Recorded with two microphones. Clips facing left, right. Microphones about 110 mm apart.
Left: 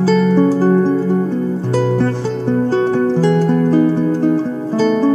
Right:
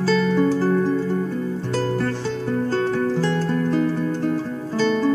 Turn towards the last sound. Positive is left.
turn(degrees=10)  # may be behind; listen again after turning